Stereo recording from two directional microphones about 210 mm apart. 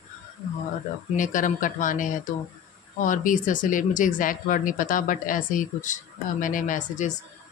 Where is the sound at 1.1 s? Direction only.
40° left (ahead or behind).